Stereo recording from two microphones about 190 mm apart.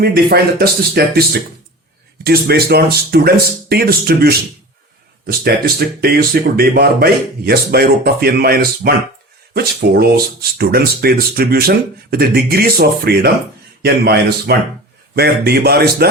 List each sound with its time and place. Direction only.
0.0 s speech: 55° right (ahead or behind)